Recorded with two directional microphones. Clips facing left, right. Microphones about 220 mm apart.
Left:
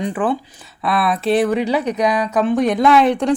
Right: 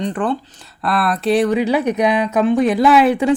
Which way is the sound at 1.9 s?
25° right (ahead or behind).